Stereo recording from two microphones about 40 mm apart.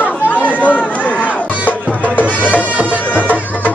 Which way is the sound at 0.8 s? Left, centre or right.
Left.